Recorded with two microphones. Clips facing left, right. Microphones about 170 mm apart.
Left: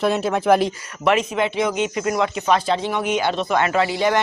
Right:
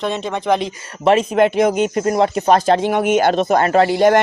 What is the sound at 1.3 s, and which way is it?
Speech, 45° right (ahead or behind).